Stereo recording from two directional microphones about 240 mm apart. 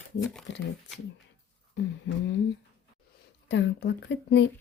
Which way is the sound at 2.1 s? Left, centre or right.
Left.